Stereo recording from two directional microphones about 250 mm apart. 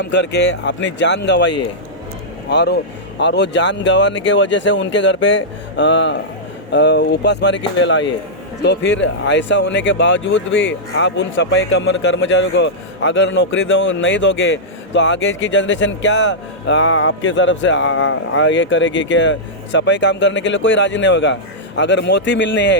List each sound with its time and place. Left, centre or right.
0.0 s speech: left
2.5 s speech: left